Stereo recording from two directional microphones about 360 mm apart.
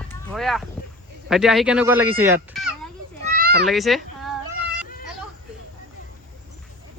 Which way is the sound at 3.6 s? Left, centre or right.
Centre.